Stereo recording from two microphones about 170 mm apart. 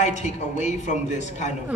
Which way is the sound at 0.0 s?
45° left (ahead or behind).